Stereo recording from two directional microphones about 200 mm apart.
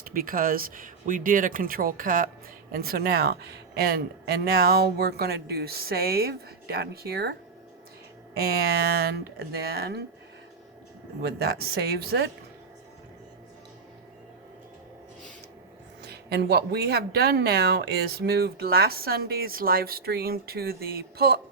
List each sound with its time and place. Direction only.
0.0 s speech: 45° right (ahead or behind)
8.4 s speech: 50° right (ahead or behind)
11.2 s speech: 55° right (ahead or behind)
16.0 s speech: 55° right (ahead or behind)